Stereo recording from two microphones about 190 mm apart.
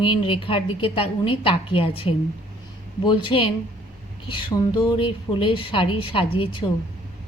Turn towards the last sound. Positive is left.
turn(degrees=30)  # may be behind; listen again after turning